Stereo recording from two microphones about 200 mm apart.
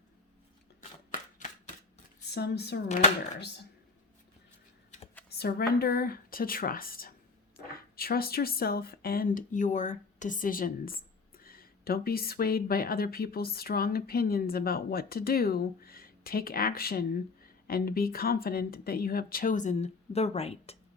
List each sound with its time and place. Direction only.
1.4 s a sound: 40° left (ahead or behind)
2.2 s speech: 55° left (ahead or behind)
5.4 s speech: 50° left (ahead or behind); by 20.7 s 30° left (ahead or behind)